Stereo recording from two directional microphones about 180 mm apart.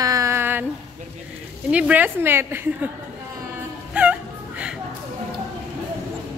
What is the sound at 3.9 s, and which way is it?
Music, 5° right (ahead or behind).